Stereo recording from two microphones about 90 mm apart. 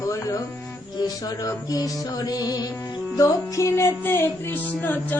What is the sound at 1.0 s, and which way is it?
Music, 45° left (ahead or behind).